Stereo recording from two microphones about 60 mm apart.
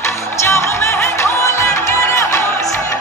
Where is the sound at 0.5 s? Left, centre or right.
Left.